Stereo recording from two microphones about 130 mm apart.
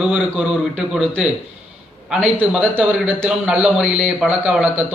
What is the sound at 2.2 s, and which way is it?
A man's voice, 10° right (ahead or behind).